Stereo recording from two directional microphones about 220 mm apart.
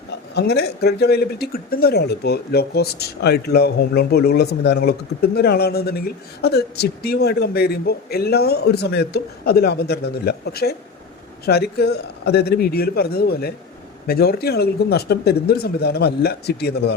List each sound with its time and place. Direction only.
0.3 s speech: 45° left (ahead or behind)